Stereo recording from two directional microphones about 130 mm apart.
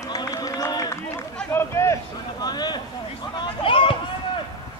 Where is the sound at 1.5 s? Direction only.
20° left (ahead or behind).